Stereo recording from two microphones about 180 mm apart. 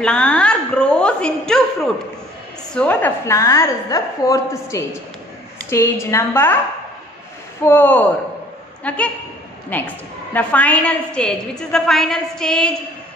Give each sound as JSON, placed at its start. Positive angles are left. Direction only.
{"t": 0.0, "sound": "a sound", "side_deg": 5}
{"t": 2.7, "sound": "a woman's voice", "side_deg": 10}
{"t": 7.6, "sound": "a woman's voice", "side_deg": 10}